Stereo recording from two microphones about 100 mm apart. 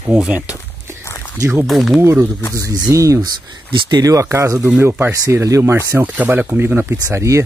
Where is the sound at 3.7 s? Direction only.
50° right (ahead or behind); by 5.7 s 30° right (ahead or behind).